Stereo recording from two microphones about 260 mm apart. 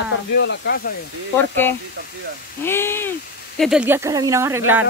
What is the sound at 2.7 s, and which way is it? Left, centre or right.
Speech, centre.